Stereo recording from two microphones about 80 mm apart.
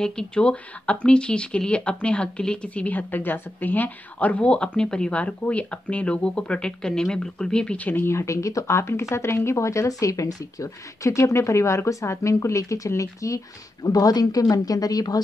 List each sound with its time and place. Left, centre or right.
0.0 s speech: centre; by 15.2 s left